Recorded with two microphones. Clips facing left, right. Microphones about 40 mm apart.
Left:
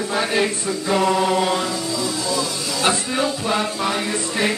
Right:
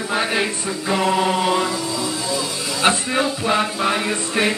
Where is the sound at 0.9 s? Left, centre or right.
Centre.